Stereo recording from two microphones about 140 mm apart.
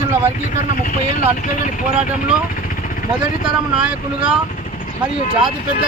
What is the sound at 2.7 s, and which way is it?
Vehicle, 75° left (ahead or behind).